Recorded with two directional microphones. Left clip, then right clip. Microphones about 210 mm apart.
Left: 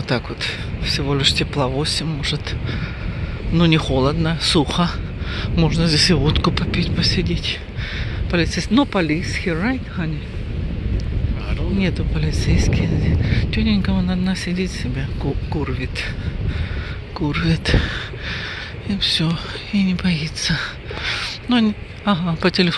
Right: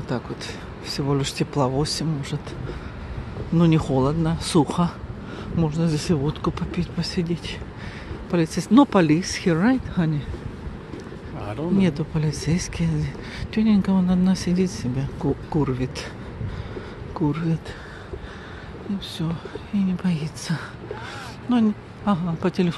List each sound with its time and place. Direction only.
0.4 s speech: 5° right (ahead or behind)
3.5 s speech: 5° right (ahead or behind)
7.0 s speech: 5° right (ahead or behind)
11.8 s speech: 15° right (ahead or behind)
17.2 s speech: centre (ahead or behind)
19.0 s speech: 15° left (ahead or behind)